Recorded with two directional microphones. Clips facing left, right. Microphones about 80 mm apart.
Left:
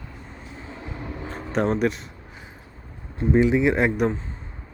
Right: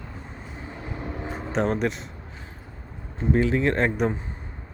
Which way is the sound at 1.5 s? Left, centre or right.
Centre.